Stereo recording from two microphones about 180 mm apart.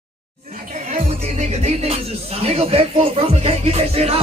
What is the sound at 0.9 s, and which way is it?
Music, 40° right (ahead or behind).